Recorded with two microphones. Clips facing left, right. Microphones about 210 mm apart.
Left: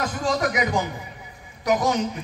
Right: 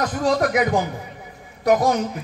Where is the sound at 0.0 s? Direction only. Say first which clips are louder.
Right 4 dB; 45° right (ahead or behind).